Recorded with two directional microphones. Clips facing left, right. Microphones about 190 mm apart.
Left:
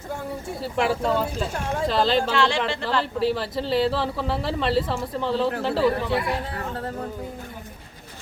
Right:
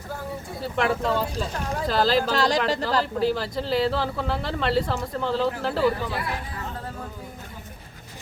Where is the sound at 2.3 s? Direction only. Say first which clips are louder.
Even; 40° right (ahead or behind).